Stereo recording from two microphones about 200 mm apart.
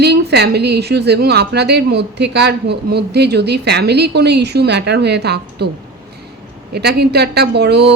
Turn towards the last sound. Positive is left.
turn(degrees=-55)  # may be behind; listen again after turning